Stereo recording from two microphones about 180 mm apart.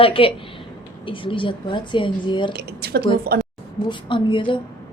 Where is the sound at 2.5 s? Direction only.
60° right (ahead or behind).